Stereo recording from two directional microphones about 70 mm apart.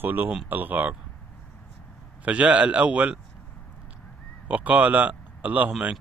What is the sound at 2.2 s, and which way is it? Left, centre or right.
Speech, centre.